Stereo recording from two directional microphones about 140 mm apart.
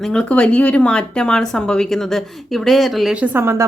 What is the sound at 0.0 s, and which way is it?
A woman's voice, 5° left (ahead or behind).